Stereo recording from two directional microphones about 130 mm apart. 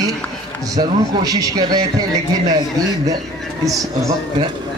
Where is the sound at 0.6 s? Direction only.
30° right (ahead or behind).